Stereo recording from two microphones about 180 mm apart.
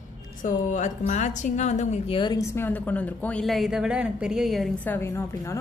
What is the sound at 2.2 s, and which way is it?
Speech, 25° left (ahead or behind).